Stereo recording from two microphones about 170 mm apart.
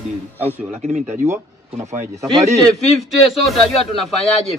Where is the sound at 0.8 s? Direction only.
45° right (ahead or behind).